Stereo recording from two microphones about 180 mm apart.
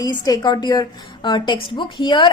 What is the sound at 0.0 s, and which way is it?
A woman's voice, 20° left (ahead or behind).